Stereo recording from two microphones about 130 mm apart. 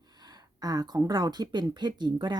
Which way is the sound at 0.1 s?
30° right (ahead or behind).